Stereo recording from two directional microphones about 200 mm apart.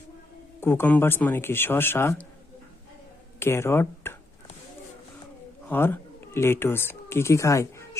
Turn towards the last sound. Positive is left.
turn(degrees=15)  # may be behind; listen again after turning